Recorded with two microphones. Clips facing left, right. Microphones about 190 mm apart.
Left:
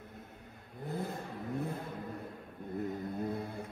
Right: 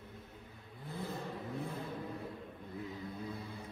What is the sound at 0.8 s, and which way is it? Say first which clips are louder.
Vehicle: left 5 dB; 50° left (ahead or behind).